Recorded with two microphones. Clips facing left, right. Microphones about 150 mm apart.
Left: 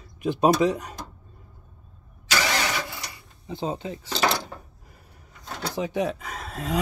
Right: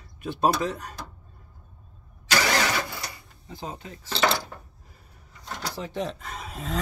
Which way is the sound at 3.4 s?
25° left (ahead or behind).